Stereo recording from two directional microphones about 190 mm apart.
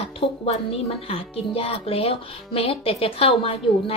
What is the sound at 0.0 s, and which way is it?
Speech, 30° left (ahead or behind).